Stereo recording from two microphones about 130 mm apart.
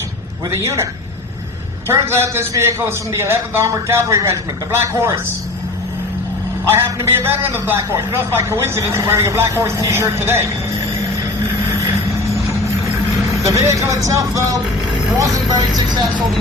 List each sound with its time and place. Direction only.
0.5 s a man's voice: 25° right (ahead or behind)
1.9 s a man's voice: 20° right (ahead or behind)
6.7 s a man's voice: 20° right (ahead or behind)
13.5 s a man's voice: 25° right (ahead or behind)